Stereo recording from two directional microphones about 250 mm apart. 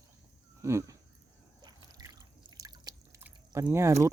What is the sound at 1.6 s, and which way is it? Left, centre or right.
Drip, centre.